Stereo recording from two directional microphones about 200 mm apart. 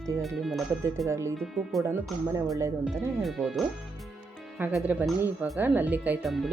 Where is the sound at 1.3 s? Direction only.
Centre (ahead or behind).